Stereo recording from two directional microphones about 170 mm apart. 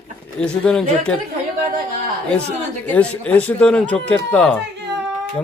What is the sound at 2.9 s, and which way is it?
Speech, 10° left (ahead or behind).